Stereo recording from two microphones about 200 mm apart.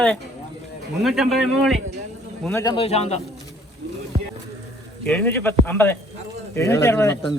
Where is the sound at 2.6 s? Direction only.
25° left (ahead or behind).